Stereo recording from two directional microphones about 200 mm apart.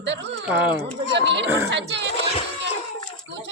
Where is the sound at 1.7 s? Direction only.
60° right (ahead or behind).